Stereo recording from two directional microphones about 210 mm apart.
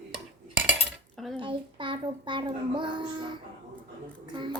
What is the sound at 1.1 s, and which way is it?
Dishes, centre (ahead or behind).